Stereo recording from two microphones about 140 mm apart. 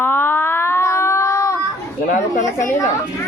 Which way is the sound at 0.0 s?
15° left (ahead or behind).